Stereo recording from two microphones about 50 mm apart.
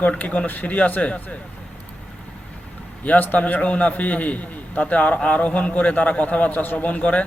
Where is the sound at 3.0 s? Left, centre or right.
Left.